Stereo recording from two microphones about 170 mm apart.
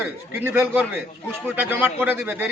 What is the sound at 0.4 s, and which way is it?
A man's voice, 10° right (ahead or behind).